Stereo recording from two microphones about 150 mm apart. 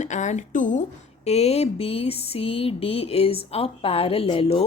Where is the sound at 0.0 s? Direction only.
55° left (ahead or behind).